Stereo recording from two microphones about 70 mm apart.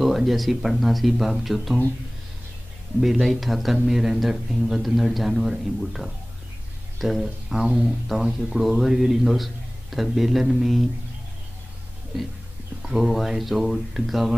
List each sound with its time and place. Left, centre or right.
0.0 s speech: centre
3.0 s speech: centre
12.8 s speech: centre